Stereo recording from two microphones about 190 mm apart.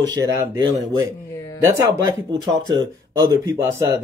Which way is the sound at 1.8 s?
20° right (ahead or behind).